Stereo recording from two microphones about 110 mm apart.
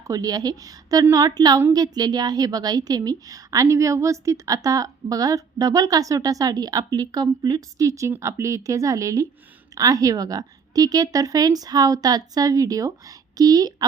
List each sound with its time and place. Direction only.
0.0 s a woman's voice: 30° right (ahead or behind)